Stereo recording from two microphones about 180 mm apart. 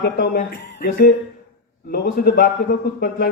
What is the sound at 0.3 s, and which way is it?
A man's voice, 55° left (ahead or behind).